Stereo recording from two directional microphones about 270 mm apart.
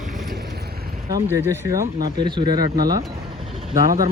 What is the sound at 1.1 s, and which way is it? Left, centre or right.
Speech, centre.